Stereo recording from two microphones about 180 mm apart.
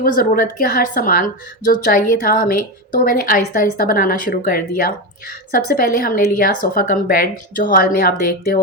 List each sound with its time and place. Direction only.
0.0 s a woman's voice: 55° left (ahead or behind)